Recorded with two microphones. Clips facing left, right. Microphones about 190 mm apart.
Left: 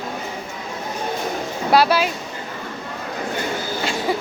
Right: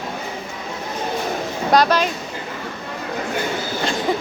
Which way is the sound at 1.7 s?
10° left (ahead or behind).